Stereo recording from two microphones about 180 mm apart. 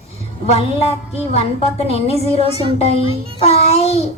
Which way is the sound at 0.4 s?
35° left (ahead or behind).